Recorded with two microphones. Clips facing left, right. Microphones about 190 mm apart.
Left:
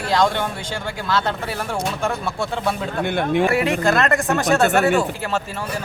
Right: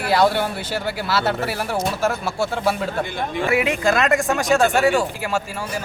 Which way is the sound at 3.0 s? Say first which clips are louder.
Left 6 dB; 65° left (ahead or behind).